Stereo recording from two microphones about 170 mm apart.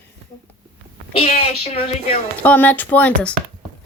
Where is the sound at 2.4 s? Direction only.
10° left (ahead or behind).